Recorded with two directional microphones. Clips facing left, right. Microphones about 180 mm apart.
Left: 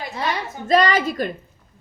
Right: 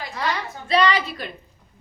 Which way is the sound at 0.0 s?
25° left (ahead or behind).